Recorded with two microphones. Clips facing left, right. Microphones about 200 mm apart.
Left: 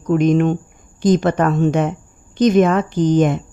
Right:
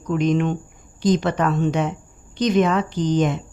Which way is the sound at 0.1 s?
50° left (ahead or behind).